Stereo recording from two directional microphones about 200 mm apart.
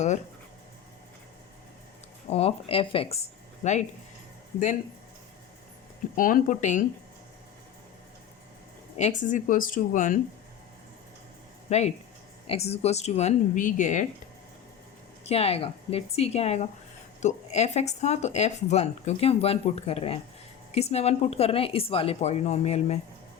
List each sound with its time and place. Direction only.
2.3 s speech: 30° left (ahead or behind)
6.1 s speech: 45° left (ahead or behind)
9.0 s speech: 35° left (ahead or behind)
11.7 s speech: 35° left (ahead or behind)
15.2 s speech: 30° left (ahead or behind)